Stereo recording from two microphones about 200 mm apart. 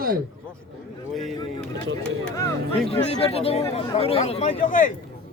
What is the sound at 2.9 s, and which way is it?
Speech, 30° left (ahead or behind).